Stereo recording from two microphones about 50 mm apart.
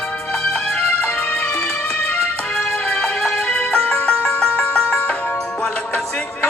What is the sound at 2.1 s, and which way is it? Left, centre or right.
Music, centre.